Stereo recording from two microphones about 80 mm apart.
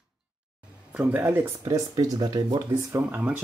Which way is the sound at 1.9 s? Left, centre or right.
Right.